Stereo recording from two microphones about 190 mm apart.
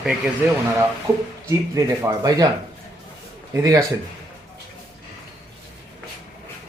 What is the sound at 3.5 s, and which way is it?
Speech, 15° right (ahead or behind).